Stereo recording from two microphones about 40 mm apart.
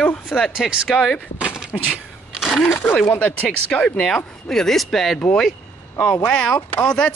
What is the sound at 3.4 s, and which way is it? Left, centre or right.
Speech, left.